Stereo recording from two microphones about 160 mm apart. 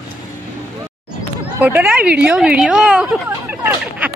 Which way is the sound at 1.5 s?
10° right (ahead or behind).